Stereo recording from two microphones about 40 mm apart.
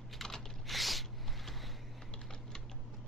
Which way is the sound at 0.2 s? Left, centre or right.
Centre.